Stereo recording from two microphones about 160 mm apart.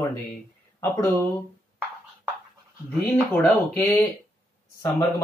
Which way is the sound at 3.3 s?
15° left (ahead or behind).